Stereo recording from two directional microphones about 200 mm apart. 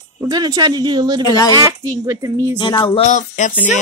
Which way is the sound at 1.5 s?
15° right (ahead or behind).